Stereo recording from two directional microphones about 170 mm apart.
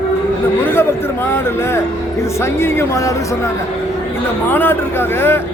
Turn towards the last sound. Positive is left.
turn(degrees=15)  # may be behind; listen again after turning